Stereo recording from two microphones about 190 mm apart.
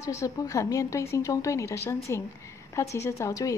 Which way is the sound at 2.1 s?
15° left (ahead or behind).